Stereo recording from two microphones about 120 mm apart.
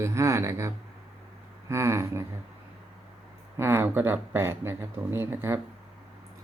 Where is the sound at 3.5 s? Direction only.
20° right (ahead or behind).